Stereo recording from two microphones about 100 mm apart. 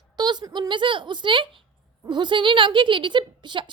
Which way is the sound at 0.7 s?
55° right (ahead or behind).